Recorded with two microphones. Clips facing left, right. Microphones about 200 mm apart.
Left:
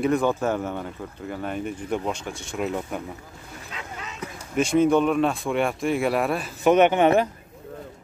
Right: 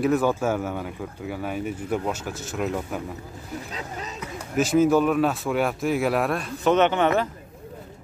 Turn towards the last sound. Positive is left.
turn(degrees=15)  # may be behind; listen again after turning